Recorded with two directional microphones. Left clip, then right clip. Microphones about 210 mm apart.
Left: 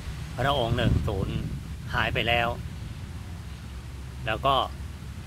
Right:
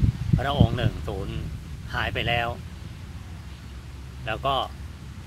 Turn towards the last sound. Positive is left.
turn(degrees=10)  # may be behind; listen again after turning